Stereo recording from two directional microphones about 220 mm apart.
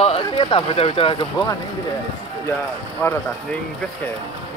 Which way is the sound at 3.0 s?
5° left (ahead or behind).